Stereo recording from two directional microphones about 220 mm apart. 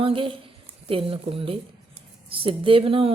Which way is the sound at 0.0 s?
25° right (ahead or behind).